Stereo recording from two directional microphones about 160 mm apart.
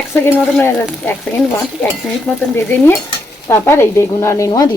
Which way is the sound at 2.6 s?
15° left (ahead or behind).